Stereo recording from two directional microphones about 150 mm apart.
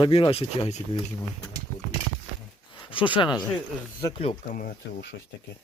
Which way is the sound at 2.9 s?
35° left (ahead or behind).